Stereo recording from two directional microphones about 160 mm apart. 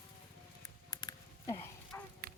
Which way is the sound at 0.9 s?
25° left (ahead or behind).